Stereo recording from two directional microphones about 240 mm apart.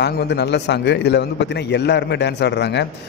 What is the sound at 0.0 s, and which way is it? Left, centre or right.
A man's voice, left.